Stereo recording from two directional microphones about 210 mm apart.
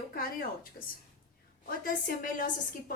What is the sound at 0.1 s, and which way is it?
A woman's voice, 45° left (ahead or behind).